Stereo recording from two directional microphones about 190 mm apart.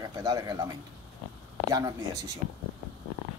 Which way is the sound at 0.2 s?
20° right (ahead or behind).